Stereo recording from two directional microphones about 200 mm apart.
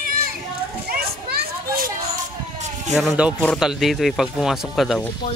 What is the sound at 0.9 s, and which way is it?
A child's voice, 50° right (ahead or behind).